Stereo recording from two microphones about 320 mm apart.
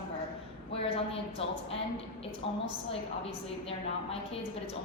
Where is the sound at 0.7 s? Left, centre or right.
Centre.